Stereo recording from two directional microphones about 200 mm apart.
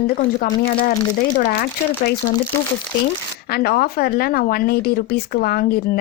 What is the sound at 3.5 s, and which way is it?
Speech, 50° left (ahead or behind).